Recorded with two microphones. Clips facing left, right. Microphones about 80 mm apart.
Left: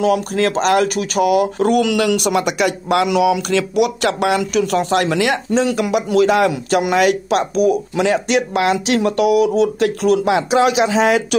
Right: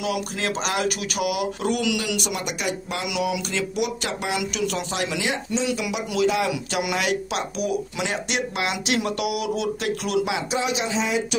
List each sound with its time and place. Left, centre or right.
0.0 s a man's voice: left
3.1 s speech: left
4.4 s speech: left
6.5 s speech: left
10.3 s a man's voice: left